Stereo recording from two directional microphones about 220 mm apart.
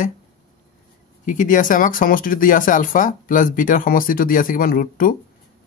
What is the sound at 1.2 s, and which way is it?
Speech, 35° left (ahead or behind).